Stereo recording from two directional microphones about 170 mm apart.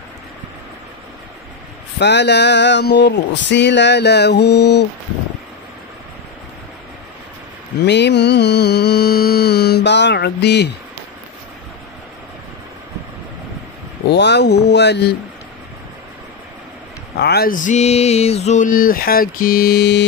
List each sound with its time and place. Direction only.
2.0 s speech: 90° left
7.8 s mantra: 85° left
14.0 s speech: 85° left
17.2 s a sound: 65° left (ahead or behind)